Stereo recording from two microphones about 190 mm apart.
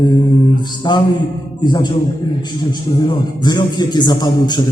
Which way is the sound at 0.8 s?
25° left (ahead or behind).